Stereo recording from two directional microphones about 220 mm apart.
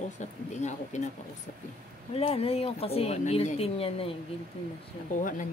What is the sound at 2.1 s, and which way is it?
Speech, 25° left (ahead or behind).